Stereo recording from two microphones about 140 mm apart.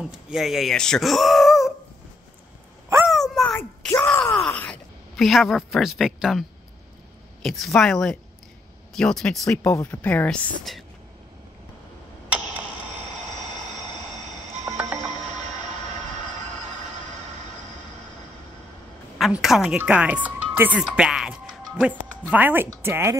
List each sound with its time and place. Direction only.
0.0 s speech: 5° right (ahead or behind)
3.1 s a sound: centre (ahead or behind)
3.5 s groan: 15° left (ahead or behind)
4.5 s speech: 10° left (ahead or behind)
7.4 s speech: centre (ahead or behind)
9.5 s speech: 20° left (ahead or behind)
10.0 s speech: 10° left (ahead or behind)
19.1 s a woman's voice: centre (ahead or behind); by 23.1 s 15° right (ahead or behind)